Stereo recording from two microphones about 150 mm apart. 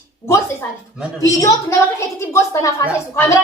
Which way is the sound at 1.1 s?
20° left (ahead or behind).